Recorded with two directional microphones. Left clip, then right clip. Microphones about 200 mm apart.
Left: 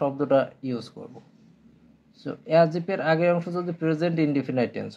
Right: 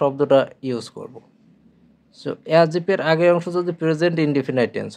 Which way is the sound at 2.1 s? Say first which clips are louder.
Right 4 dB; 35° right (ahead or behind).